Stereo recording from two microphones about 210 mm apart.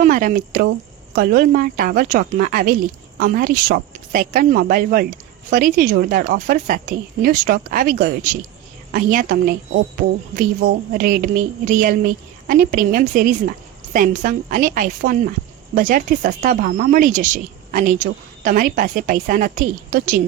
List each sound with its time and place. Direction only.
0.0 s speech: 40° right (ahead or behind)